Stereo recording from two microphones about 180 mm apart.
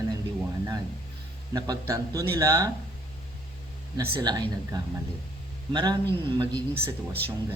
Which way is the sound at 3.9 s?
20° right (ahead or behind).